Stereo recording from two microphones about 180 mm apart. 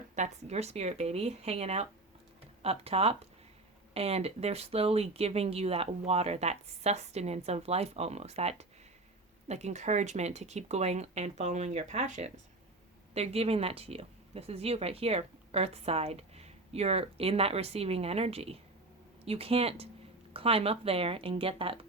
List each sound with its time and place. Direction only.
0.2 s speech: 35° right (ahead or behind)